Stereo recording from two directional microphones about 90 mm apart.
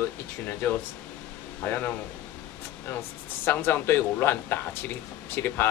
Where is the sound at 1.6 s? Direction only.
20° left (ahead or behind).